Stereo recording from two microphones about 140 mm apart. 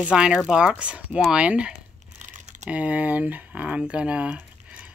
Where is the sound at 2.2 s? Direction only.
60° right (ahead or behind).